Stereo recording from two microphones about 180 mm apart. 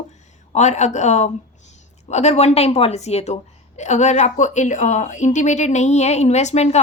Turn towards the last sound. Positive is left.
turn(degrees=40)  # may be behind; listen again after turning